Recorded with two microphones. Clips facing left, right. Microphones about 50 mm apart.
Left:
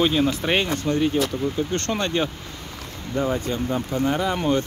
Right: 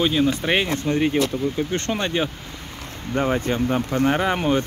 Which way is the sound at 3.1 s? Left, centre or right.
Right.